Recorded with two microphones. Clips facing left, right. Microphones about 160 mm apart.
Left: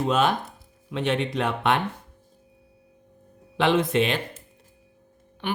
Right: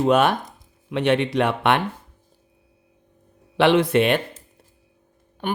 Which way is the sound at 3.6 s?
75° right (ahead or behind).